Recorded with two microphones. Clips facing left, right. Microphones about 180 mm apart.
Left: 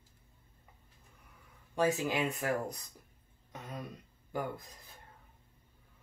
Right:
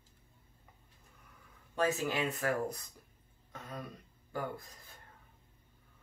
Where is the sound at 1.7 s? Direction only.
15° left (ahead or behind).